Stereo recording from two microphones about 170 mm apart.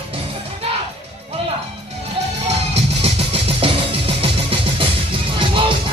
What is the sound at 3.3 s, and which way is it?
Music, 35° right (ahead or behind).